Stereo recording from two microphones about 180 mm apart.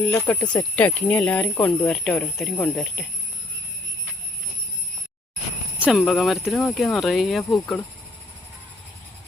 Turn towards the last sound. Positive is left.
turn(degrees=20)  # may be behind; listen again after turning